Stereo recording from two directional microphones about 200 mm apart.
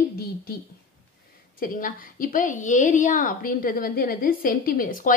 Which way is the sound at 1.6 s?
45° left (ahead or behind).